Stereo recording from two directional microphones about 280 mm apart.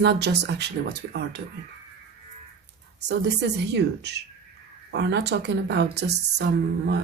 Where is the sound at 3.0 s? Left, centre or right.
Right.